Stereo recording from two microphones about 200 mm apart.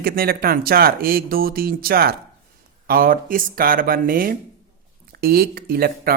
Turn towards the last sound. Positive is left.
turn(degrees=-50)  # may be behind; listen again after turning